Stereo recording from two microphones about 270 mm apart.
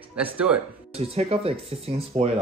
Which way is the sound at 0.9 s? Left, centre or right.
Right.